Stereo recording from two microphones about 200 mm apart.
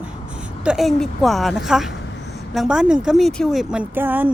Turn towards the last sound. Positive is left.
turn(degrees=-10)  # may be behind; listen again after turning